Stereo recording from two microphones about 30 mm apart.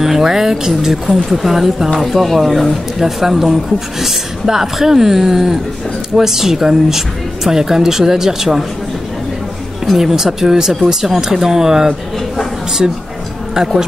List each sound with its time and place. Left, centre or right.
0.0 s speech: centre
3.0 s speech: centre
4.8 s speech: centre
9.9 s speech: centre